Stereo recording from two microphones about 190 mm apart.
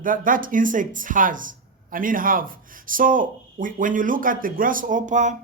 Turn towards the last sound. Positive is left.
turn(degrees=-40)  # may be behind; listen again after turning